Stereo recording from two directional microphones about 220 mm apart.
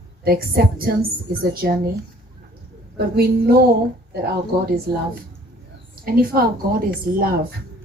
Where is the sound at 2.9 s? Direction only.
45° right (ahead or behind).